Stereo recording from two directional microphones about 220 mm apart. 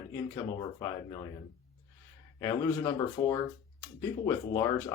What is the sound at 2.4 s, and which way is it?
Speech, 15° left (ahead or behind).